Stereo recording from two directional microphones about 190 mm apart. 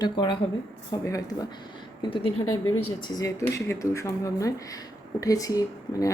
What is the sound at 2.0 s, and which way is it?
Speech, 30° left (ahead or behind).